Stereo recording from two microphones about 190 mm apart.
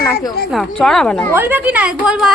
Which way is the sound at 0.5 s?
Centre (ahead or behind).